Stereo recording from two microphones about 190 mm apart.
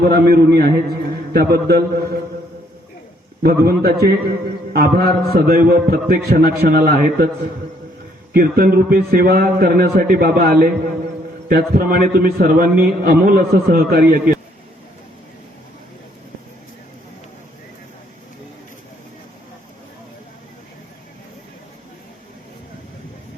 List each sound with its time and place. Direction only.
0.1 s a man's voice: 55° right (ahead or behind)
3.4 s a man's voice: 55° right (ahead or behind)
8.3 s a man's voice: 50° right (ahead or behind)